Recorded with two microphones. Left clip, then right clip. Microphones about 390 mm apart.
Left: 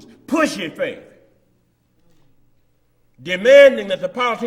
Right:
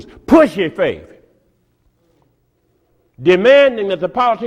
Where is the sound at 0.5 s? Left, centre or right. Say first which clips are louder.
Right 7 dB; right.